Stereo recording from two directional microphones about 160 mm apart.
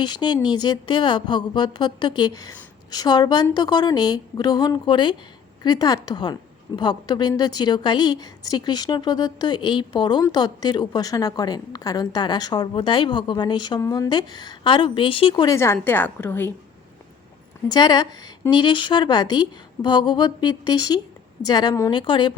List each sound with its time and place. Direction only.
0.0 s a woman's voice: 25° left (ahead or behind)
15.4 s a woman's voice: 15° left (ahead or behind)
17.7 s a woman's voice: 25° left (ahead or behind)